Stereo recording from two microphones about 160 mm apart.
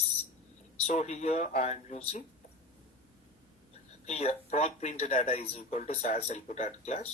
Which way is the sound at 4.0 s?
40° left (ahead or behind).